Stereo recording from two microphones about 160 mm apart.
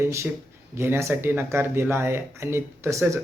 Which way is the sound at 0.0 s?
15° right (ahead or behind).